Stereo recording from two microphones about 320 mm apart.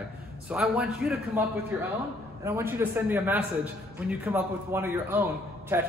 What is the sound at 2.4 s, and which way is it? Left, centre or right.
A man's voice, centre.